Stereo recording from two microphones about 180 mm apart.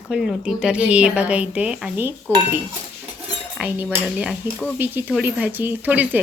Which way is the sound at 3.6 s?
10° right (ahead or behind).